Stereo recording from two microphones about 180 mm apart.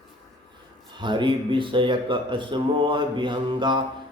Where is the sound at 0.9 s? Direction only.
25° right (ahead or behind).